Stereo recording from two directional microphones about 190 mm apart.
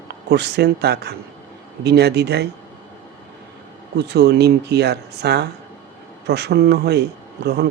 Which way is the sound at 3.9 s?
60° right (ahead or behind).